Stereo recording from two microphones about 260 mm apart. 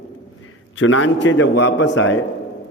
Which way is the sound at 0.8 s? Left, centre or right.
Left.